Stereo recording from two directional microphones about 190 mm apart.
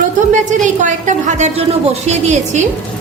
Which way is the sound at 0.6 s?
40° right (ahead or behind).